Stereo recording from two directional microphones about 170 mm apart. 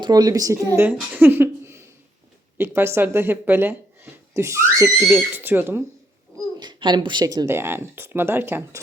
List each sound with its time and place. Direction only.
0.0 s speech: 25° right (ahead or behind)
6.6 s speech: 25° right (ahead or behind)